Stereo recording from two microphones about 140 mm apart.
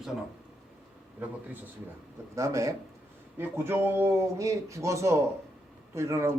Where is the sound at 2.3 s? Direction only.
20° right (ahead or behind).